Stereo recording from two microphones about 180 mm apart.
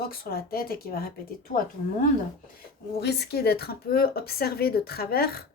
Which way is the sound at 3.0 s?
65° left (ahead or behind).